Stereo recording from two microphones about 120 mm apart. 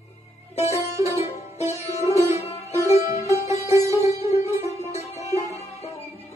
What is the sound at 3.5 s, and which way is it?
Music, 25° right (ahead or behind).